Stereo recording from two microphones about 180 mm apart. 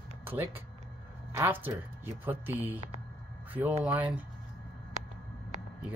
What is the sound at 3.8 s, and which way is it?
Speech, 10° right (ahead or behind).